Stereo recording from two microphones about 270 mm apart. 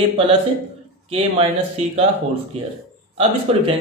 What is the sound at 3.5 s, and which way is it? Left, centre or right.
Speech, right.